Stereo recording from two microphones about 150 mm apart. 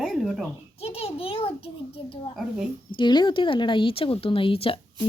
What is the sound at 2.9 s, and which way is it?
Speech, 30° left (ahead or behind).